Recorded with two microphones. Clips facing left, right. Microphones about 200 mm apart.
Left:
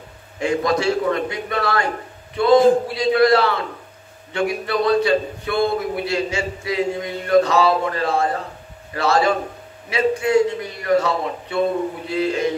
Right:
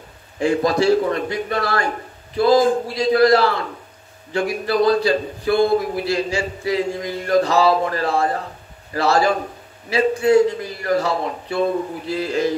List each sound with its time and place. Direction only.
0.4 s a man's voice: 30° right (ahead or behind)